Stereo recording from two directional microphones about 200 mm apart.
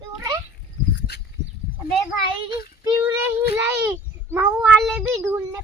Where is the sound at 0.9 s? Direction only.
55° left (ahead or behind).